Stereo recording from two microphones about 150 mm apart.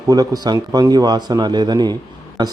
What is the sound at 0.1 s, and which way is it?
A man's voice, 25° right (ahead or behind).